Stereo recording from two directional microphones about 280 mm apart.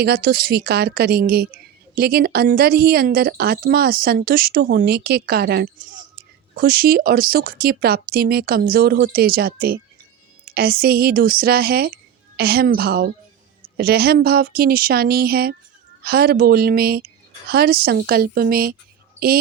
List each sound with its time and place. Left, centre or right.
0.0 s speech: right